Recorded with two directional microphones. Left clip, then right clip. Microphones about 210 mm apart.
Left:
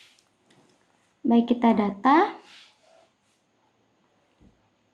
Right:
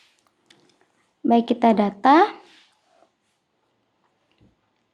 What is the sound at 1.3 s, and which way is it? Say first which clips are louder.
Speech: right 4 dB; 45° right (ahead or behind).